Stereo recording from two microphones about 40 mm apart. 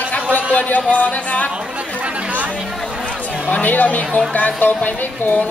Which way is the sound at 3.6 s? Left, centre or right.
Left.